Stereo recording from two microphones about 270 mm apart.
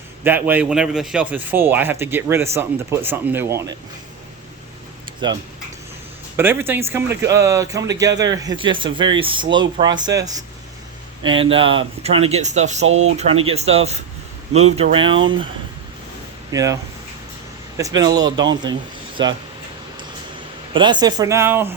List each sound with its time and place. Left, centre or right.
0.3 s speech: centre
6.3 s speech: centre
16.5 s speech: centre
20.7 s speech: centre